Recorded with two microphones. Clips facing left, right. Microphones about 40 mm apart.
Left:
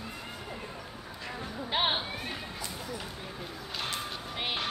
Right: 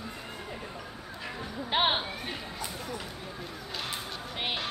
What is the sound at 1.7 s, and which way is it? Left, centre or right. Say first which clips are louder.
Music: right 3 dB; centre.